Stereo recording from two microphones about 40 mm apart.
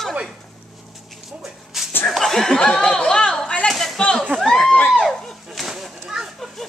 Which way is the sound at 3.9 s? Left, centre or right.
Centre.